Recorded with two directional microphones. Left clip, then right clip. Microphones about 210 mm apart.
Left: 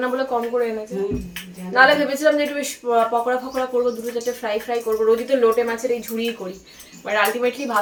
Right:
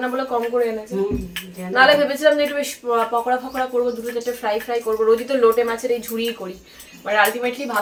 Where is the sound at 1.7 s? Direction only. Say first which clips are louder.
Right 1 dB; 5° right (ahead or behind).